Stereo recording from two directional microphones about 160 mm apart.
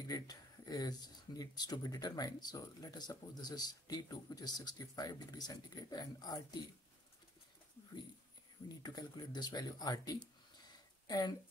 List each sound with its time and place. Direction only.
0.1 s speech: 25° left (ahead or behind)
8.8 s speech: 25° left (ahead or behind)